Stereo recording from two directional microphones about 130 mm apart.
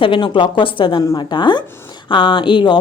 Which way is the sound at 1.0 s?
30° left (ahead or behind).